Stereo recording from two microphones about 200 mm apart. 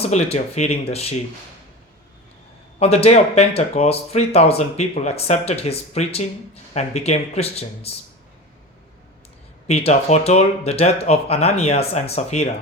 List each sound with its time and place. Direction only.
0.0 s speech: 30° left (ahead or behind)
2.7 s speech: 30° left (ahead or behind)
9.6 s speech: 30° left (ahead or behind)